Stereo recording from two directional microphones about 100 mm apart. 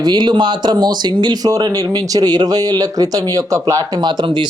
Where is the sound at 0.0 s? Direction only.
45° right (ahead or behind).